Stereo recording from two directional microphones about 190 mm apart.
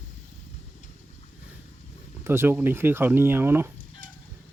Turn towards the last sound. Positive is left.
turn(degrees=-45)  # may be behind; listen again after turning